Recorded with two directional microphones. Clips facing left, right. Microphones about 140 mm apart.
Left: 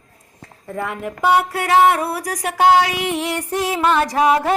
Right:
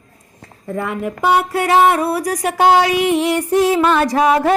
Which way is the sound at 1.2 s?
Centre (ahead or behind).